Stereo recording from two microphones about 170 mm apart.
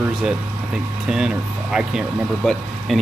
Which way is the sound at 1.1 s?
5° right (ahead or behind).